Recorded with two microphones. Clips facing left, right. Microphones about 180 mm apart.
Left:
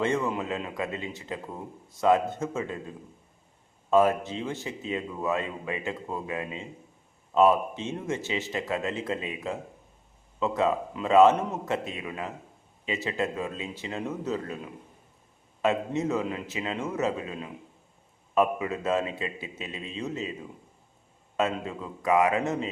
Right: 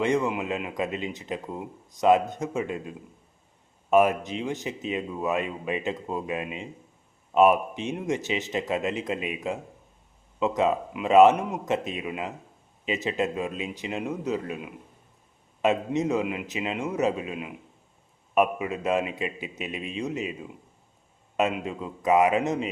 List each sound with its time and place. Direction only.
0.0 s speech: 15° right (ahead or behind)
21.3 s speech: 15° right (ahead or behind)